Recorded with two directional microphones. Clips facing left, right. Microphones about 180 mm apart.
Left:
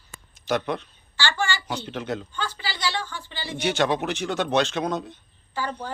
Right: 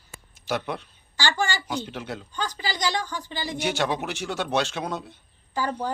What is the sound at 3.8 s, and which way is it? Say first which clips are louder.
Speech: left 3 dB; 10° right (ahead or behind).